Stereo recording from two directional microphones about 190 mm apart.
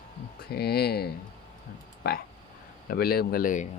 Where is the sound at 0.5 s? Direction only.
55° left (ahead or behind).